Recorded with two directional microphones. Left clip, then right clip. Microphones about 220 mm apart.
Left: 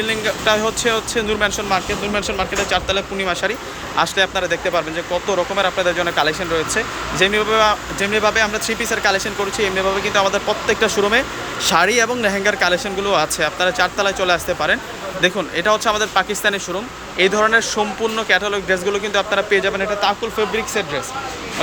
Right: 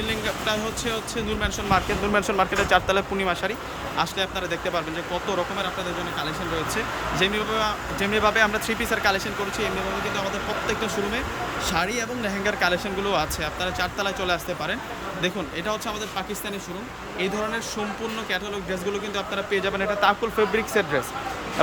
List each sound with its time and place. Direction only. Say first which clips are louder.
0.0 s speech: left 8 dB; 5° right (ahead or behind)
2.1 s speech: even; 15° right (ahead or behind)